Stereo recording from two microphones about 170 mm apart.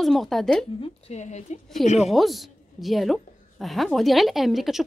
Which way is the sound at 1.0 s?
40° left (ahead or behind).